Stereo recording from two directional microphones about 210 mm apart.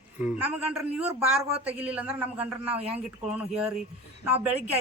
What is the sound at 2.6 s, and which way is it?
Speech, 30° right (ahead or behind).